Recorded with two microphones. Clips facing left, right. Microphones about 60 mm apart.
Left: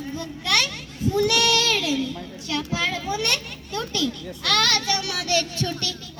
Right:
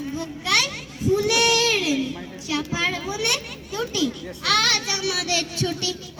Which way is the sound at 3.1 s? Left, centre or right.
Centre.